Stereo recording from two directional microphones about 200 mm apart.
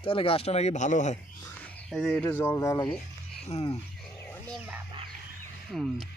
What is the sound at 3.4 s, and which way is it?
Speech, 30° left (ahead or behind).